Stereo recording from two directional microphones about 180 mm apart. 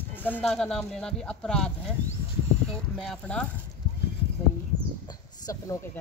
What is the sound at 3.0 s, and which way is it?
Speech, 5° left (ahead or behind).